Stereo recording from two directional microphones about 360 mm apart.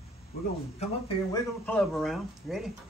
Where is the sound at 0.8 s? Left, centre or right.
Centre.